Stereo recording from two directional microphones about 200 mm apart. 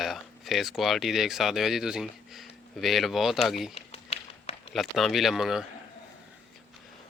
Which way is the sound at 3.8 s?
30° left (ahead or behind).